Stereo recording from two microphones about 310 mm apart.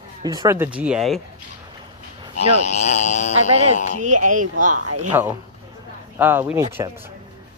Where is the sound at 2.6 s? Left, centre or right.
Left.